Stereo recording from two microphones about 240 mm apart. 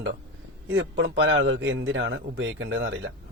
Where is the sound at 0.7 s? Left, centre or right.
Right.